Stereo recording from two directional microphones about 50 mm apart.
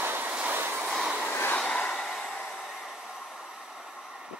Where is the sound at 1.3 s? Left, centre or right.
Left.